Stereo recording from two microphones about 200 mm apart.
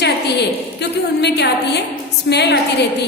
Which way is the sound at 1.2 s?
55° left (ahead or behind).